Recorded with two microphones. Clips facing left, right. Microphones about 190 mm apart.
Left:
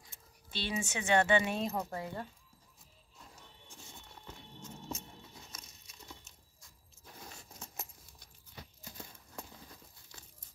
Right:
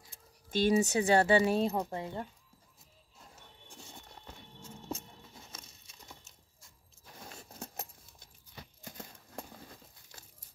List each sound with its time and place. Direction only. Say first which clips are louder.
0.5 s speech: right 11 dB; 45° right (ahead or behind); by 2.2 s 25° right (ahead or behind)
5.5 s crumpling: right 2 dB; 30° right (ahead or behind)
7.5 s a sound: right 6 dB; 60° right (ahead or behind)
8.8 s horse: right 5 dB; 50° right (ahead or behind)